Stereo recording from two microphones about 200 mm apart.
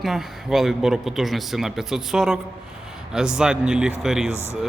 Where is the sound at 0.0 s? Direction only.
Centre (ahead or behind).